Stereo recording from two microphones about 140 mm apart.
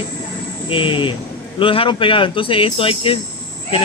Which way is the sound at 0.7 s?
35° left (ahead or behind).